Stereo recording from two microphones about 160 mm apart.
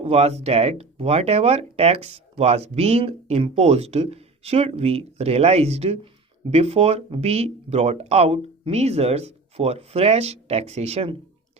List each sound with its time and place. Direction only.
0.0 s speech: 40° right (ahead or behind)